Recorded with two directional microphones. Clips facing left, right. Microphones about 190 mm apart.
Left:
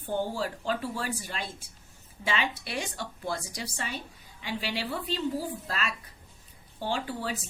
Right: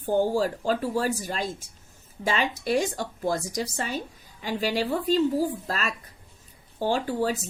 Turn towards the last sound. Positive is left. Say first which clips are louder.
# right 7 dB
turn(degrees=-40)  # may be behind; listen again after turning